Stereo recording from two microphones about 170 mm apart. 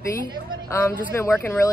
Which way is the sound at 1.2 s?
15° left (ahead or behind).